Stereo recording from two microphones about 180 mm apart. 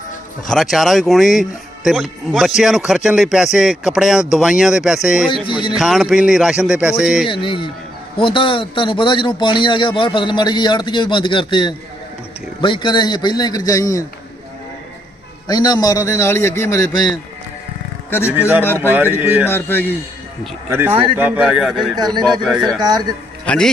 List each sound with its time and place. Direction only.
0.4 s speech: centre (ahead or behind)
5.5 s a man's voice: 25° left (ahead or behind)
5.7 s speech: centre (ahead or behind)
7.3 s a man's voice: 30° left (ahead or behind)
15.4 s a man's voice: 20° left (ahead or behind)
18.3 s speech: 10° right (ahead or behind)
19.5 s a man's voice: 10° left (ahead or behind)
20.7 s speech: 10° right (ahead or behind)
22.8 s speech: 20° right (ahead or behind)
23.5 s a man's voice: 5° left (ahead or behind)